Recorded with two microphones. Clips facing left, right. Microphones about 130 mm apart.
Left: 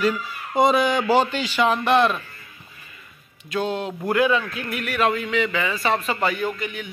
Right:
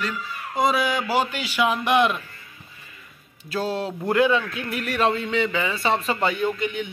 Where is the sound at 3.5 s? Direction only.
30° right (ahead or behind).